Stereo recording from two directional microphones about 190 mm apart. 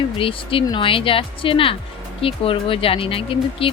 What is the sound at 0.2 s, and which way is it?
Speech, 30° left (ahead or behind).